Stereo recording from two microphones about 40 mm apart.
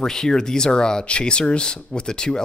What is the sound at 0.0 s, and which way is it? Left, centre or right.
Speech, centre.